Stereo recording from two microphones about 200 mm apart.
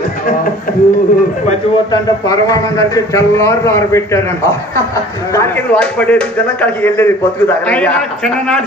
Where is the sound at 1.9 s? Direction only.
20° left (ahead or behind).